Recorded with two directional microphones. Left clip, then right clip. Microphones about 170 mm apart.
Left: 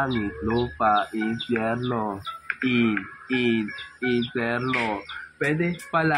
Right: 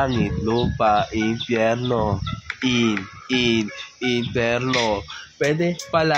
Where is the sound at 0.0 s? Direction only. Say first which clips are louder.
Right 4 dB; 40° right (ahead or behind).